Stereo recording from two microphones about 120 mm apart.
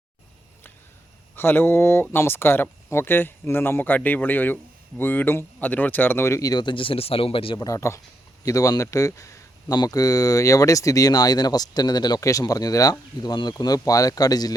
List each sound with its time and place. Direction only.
1.4 s speech: 20° left (ahead or behind); by 7.6 s 50° left (ahead or behind)
7.6 s speech: 25° left (ahead or behind)